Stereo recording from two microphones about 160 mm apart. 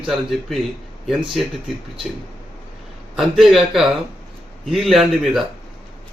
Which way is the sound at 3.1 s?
Centre (ahead or behind).